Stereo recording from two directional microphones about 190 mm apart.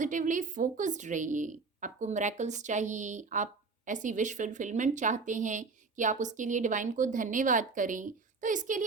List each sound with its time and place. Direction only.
0.0 s a woman's voice: 40° right (ahead or behind)